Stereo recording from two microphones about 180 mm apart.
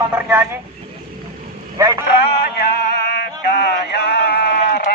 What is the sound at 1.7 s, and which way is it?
Vehicle, 20° right (ahead or behind).